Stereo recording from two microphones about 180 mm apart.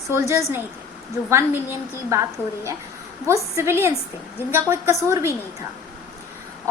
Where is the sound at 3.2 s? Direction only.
15° right (ahead or behind).